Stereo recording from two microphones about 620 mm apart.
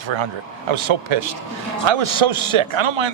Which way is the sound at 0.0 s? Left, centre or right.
Right.